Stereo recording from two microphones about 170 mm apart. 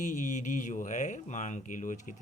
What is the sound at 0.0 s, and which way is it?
Speech, 45° left (ahead or behind).